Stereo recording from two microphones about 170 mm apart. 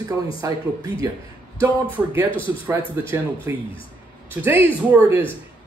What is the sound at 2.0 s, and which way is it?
A man's voice, 10° right (ahead or behind).